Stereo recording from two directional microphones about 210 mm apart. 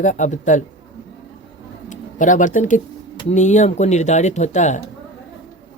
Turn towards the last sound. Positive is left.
turn(degrees=35)  # may be behind; listen again after turning